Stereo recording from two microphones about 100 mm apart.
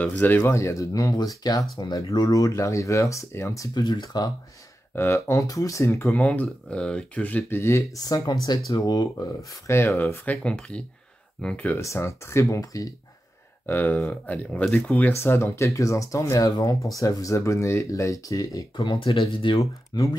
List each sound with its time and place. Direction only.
0.0 s speech: 20° left (ahead or behind)
0.4 s speech: 30° left (ahead or behind)
3.8 s speech: 45° left (ahead or behind)
4.9 s speech: 25° left (ahead or behind)
6.1 s speech: 15° left (ahead or behind)
8.0 s speech: 40° left (ahead or behind)
9.7 s speech: 25° left (ahead or behind)
10.3 s speech: 10° left (ahead or behind)
11.8 s speech: 30° left (ahead or behind)
13.7 s speech: 20° left (ahead or behind); by 18.9 s 35° left (ahead or behind)
18.9 s speech: 55° left (ahead or behind)
19.6 s speech: 35° left (ahead or behind)